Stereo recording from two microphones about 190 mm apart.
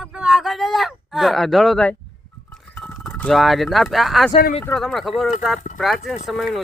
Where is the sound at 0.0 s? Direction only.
5° right (ahead or behind).